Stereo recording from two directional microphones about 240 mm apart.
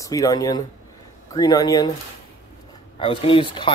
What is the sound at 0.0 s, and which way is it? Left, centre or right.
Speech, centre.